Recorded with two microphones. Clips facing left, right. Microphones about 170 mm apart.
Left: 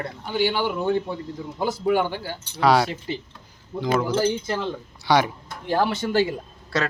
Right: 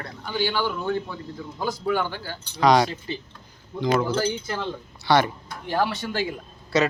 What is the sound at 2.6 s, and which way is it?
Speech, 5° left (ahead or behind).